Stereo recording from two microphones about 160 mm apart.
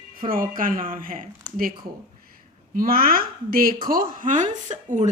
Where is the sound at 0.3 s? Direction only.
60° right (ahead or behind).